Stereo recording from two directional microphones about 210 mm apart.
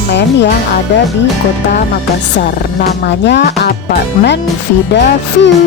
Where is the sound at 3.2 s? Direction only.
55° left (ahead or behind).